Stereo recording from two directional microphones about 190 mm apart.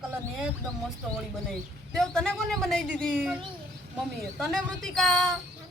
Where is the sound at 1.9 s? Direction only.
Centre (ahead or behind).